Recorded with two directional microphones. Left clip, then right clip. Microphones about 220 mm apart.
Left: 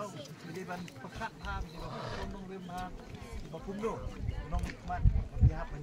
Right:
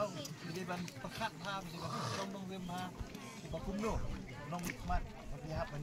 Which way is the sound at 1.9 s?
55° right (ahead or behind).